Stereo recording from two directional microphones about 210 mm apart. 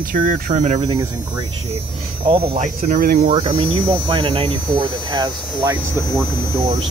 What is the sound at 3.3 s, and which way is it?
Hum, 25° right (ahead or behind).